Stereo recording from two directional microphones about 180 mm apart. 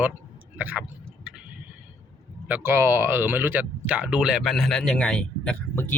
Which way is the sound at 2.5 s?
15° right (ahead or behind).